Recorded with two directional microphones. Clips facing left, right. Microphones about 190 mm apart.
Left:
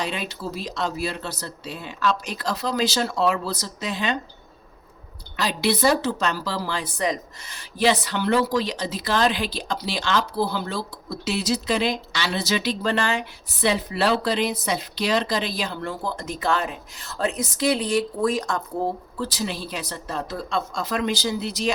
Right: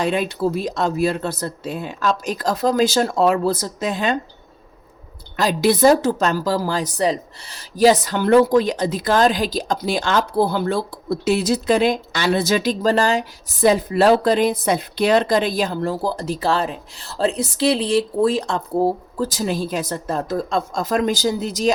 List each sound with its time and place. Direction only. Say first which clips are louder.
0.0 s a woman's voice: right 9 dB; 50° right (ahead or behind)
5.4 s a woman's voice: right 6 dB; 45° right (ahead or behind)
15.8 s speech: right 7 dB; 35° right (ahead or behind)